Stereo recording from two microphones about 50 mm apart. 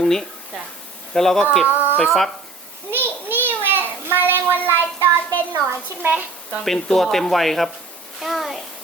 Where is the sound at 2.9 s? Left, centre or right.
Right.